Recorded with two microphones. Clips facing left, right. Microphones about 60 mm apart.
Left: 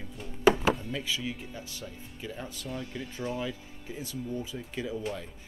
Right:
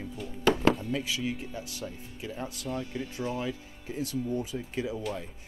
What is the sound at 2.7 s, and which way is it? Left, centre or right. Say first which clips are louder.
Speech: right 3 dB; centre.